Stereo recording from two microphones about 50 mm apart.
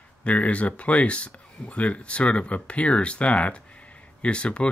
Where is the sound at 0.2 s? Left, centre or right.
Left.